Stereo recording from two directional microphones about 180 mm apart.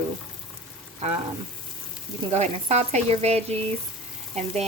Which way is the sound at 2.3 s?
35° right (ahead or behind).